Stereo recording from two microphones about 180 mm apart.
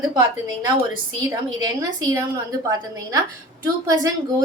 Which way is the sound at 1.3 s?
20° right (ahead or behind).